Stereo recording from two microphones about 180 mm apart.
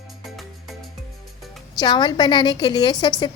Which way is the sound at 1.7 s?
25° left (ahead or behind).